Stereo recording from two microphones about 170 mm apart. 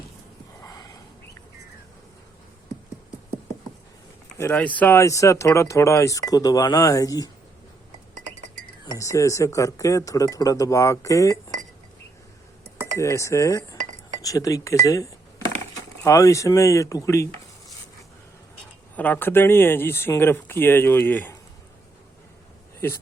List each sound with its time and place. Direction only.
0.6 s a sound: 20° left (ahead or behind)
4.5 s speech: 10° left (ahead or behind)
9.0 s speech: 20° left (ahead or behind)
13.0 s speech: 15° left (ahead or behind)
18.9 s speech: 10° left (ahead or behind)